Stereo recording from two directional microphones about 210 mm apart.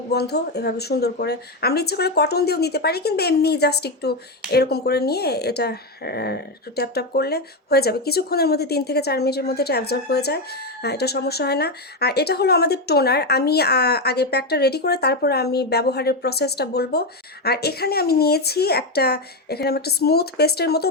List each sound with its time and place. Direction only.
0.1 s speech: 50° left (ahead or behind)